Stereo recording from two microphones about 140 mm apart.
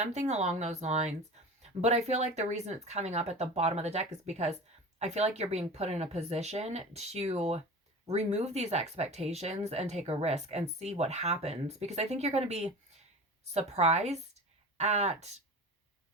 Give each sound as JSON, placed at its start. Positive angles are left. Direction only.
{"t": 0.0, "sound": "speech", "side_deg": -55}